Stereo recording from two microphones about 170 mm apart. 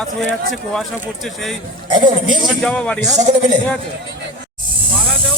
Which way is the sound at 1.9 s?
25° right (ahead or behind).